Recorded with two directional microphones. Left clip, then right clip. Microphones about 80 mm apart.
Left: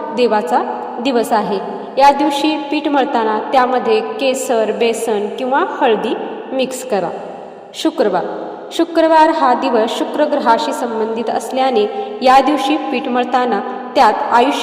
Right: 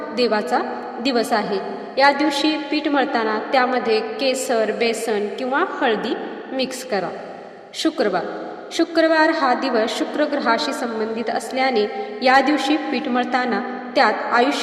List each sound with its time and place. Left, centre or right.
0.2 s a woman's voice: left